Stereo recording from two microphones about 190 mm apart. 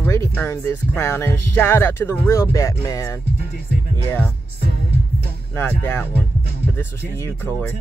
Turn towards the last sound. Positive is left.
turn(degrees=10)  # may be behind; listen again after turning